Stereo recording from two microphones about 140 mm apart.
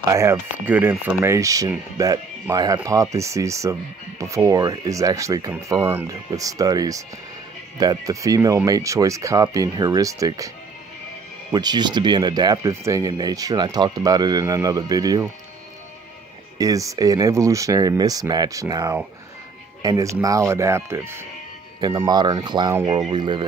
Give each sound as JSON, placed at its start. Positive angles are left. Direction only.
{"t": 0.1, "sound": "speech", "side_deg": -20}
{"t": 11.5, "sound": "speech", "side_deg": -30}
{"t": 16.5, "sound": "speech", "side_deg": -25}